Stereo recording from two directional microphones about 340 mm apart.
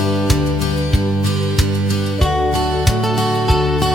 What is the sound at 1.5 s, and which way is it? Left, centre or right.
Music, centre.